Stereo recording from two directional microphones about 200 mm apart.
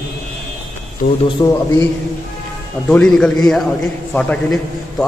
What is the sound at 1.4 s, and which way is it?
Speech, 20° left (ahead or behind).